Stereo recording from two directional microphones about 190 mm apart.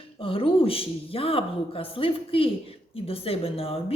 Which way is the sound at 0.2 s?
30° left (ahead or behind).